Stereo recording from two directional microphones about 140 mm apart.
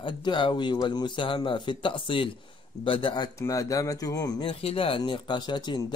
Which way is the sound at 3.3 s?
20° left (ahead or behind).